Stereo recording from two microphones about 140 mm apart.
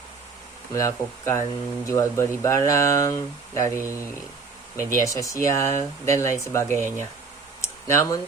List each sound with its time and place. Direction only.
0.7 s speech: 20° left (ahead or behind)
4.9 s speech: 25° left (ahead or behind)
7.6 s a sound: 20° left (ahead or behind)